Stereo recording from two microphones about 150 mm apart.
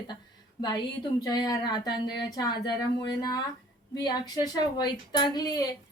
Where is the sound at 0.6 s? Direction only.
30° left (ahead or behind).